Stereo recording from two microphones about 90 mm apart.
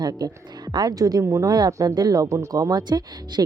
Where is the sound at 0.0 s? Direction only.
50° right (ahead or behind).